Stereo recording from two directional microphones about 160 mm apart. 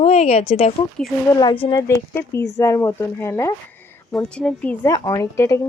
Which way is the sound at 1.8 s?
15° left (ahead or behind).